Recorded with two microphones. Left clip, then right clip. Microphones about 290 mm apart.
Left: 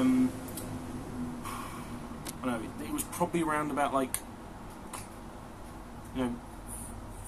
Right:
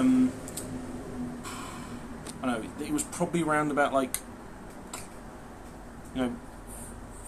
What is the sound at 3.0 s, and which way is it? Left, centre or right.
Speech, centre.